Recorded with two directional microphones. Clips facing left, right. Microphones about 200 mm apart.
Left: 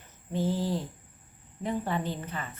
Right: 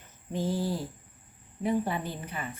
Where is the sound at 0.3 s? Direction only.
10° right (ahead or behind).